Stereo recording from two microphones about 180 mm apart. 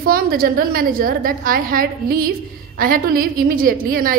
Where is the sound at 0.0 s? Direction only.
55° right (ahead or behind).